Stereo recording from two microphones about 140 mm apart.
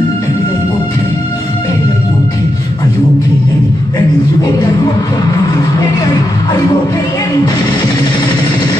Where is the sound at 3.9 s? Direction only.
25° left (ahead or behind).